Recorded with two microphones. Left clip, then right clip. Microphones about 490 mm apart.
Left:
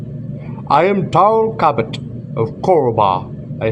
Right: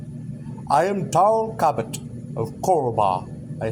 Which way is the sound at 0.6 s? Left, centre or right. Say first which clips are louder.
Left 7 dB; right.